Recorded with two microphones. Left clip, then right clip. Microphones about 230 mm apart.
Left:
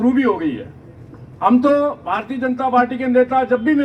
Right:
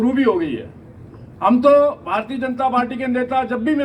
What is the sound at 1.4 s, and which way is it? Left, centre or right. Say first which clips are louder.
A man's voice: right 2 dB; right.